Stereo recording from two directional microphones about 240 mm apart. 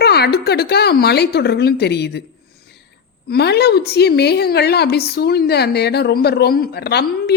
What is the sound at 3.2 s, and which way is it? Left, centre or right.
A woman's voice, left.